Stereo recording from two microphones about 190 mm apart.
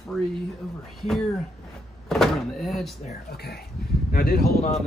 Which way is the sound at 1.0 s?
Centre (ahead or behind).